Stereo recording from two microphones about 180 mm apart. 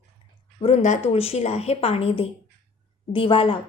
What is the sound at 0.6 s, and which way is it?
A woman's voice, 40° left (ahead or behind).